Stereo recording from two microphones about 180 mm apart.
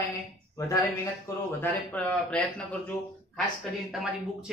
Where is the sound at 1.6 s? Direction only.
10° left (ahead or behind).